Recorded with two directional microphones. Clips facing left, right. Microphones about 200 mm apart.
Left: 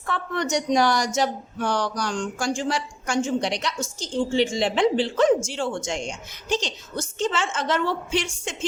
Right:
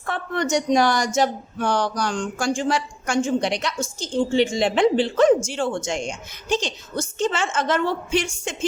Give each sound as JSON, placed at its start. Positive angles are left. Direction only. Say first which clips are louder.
{"t": 0.0, "sound": "a woman's voice", "louder": "right 2 dB", "side_deg": -50}